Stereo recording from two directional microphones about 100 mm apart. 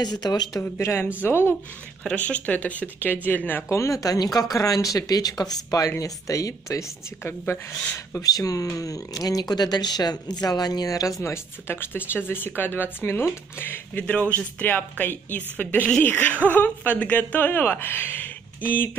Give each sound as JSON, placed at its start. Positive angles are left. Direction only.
{"t": 0.0, "sound": "speech", "side_deg": 40}
{"t": 0.7, "sound": "speech", "side_deg": 25}
{"t": 2.0, "sound": "speech", "side_deg": 15}
{"t": 3.7, "sound": "speech", "side_deg": 30}
{"t": 8.1, "sound": "speech", "side_deg": 35}